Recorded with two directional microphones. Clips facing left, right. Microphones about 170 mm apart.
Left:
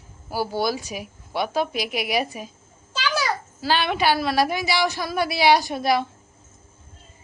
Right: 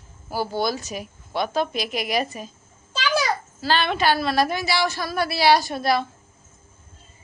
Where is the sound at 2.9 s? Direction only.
15° right (ahead or behind).